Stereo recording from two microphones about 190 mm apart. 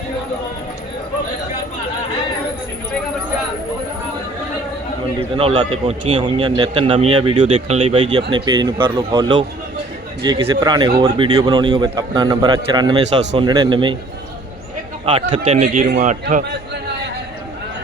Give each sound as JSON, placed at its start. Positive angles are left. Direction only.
{"t": 5.4, "sound": "a man's voice", "side_deg": -30}
{"t": 15.5, "sound": "a man's voice", "side_deg": -40}